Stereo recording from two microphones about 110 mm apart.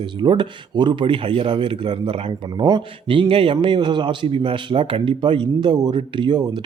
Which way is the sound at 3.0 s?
55° right (ahead or behind).